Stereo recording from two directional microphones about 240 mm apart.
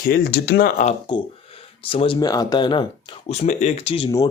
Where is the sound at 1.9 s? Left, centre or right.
Left.